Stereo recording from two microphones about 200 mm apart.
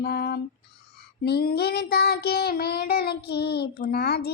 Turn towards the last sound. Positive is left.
turn(degrees=50)  # may be behind; listen again after turning